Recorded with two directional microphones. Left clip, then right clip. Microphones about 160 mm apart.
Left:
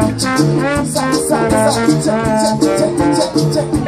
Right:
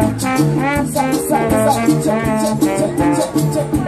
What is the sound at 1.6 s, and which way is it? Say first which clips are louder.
Speech: left 1 dB; 20° right (ahead or behind).